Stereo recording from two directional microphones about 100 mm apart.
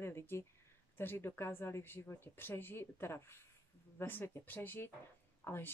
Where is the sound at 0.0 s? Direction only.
25° left (ahead or behind).